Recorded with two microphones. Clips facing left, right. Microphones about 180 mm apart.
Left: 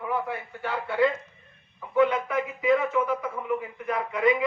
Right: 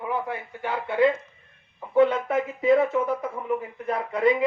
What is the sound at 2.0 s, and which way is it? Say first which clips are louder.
Speech: right 3 dB; 30° right (ahead or behind).